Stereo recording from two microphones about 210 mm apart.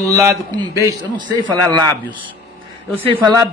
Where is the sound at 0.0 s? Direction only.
15° right (ahead or behind).